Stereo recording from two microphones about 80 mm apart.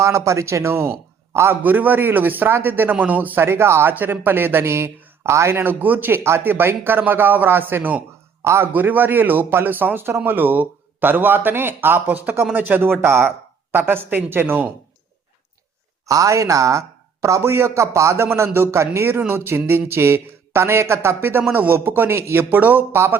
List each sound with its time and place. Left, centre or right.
0.0 s a man's voice: right
8.4 s a man's voice: right
8.7 s a man's voice: right
16.0 s a man's voice: right